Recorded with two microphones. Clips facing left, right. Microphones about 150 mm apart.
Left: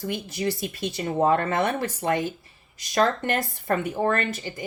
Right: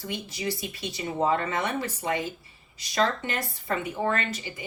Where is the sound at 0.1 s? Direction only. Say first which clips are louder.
Left 3 dB; 50° left (ahead or behind).